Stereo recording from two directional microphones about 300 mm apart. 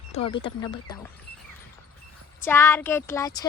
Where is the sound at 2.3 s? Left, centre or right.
Centre.